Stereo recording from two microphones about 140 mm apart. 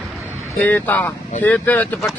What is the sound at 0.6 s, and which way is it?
Speech, 10° left (ahead or behind).